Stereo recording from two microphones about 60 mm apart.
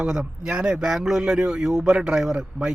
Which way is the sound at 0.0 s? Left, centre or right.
Centre.